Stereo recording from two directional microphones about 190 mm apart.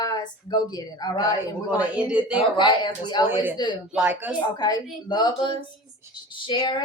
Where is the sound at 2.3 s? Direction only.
25° left (ahead or behind).